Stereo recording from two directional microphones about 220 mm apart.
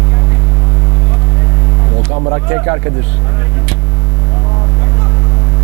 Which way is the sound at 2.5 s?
20° right (ahead or behind).